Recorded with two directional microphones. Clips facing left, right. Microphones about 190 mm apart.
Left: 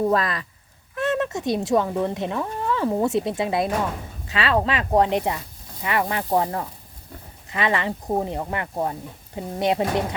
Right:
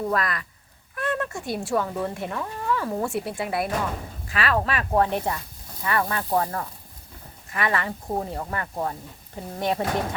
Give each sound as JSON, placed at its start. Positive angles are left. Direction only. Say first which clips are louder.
{"t": 0.1, "sound": "speech", "louder": "left 4 dB", "side_deg": 25}